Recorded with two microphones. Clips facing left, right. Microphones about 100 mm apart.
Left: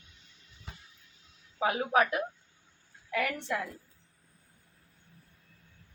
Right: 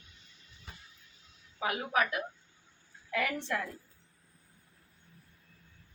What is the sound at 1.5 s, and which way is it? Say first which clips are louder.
Speech: left 4 dB; 30° left (ahead or behind).